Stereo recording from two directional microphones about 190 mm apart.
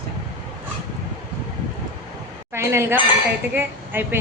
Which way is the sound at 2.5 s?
15° right (ahead or behind).